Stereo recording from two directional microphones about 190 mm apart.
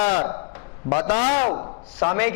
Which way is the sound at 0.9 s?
25° left (ahead or behind).